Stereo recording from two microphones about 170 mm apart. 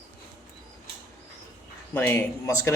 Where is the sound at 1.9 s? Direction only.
10° left (ahead or behind).